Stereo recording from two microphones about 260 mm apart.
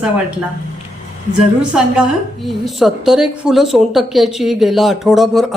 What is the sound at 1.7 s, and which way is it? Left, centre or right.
A woman's voice, centre.